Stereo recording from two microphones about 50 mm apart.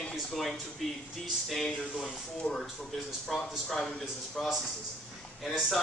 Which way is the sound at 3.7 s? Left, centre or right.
Centre.